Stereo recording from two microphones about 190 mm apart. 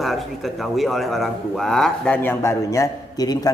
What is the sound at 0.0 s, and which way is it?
A man's voice, centre (ahead or behind).